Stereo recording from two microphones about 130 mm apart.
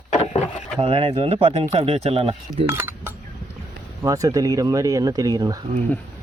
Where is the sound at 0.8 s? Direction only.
40° right (ahead or behind).